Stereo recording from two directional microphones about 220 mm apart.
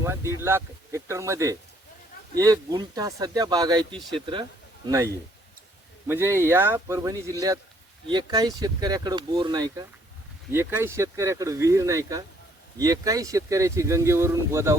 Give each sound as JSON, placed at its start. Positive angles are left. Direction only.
{"t": 0.0, "sound": "speech", "side_deg": -10}
{"t": 4.9, "sound": "speech", "side_deg": -15}